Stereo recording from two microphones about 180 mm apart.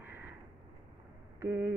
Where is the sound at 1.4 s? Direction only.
15° right (ahead or behind).